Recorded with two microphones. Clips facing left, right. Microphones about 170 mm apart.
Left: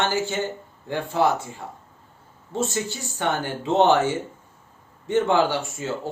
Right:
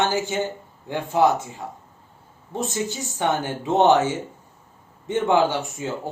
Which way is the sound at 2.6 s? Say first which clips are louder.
Even; 15° right (ahead or behind).